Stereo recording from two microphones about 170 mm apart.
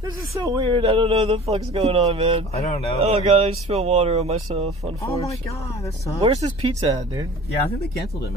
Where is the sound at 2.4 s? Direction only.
40° left (ahead or behind).